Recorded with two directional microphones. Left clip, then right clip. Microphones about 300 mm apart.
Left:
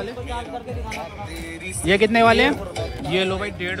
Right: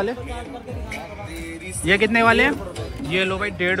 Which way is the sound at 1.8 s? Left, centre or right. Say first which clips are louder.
Left 1 dB; centre.